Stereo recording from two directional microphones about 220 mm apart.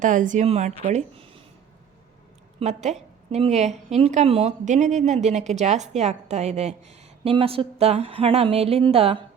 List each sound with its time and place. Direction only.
0.0 s a woman's voice: 35° right (ahead or behind)
2.6 s a woman's voice: 30° right (ahead or behind)